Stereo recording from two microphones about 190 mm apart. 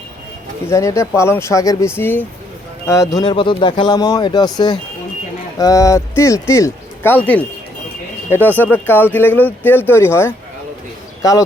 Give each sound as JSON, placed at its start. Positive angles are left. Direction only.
{"t": 0.7, "sound": "speech", "side_deg": 15}